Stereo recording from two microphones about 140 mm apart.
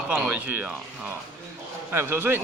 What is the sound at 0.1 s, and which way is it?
A man's voice, 5° right (ahead or behind).